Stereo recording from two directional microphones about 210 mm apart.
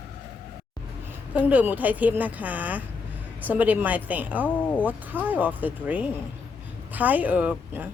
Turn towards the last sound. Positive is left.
turn(degrees=-5)  # may be behind; listen again after turning